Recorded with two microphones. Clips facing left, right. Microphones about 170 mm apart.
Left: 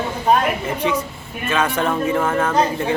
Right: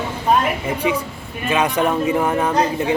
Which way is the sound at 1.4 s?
15° right (ahead or behind).